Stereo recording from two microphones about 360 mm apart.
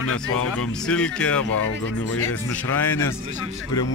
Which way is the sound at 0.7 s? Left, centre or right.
Centre.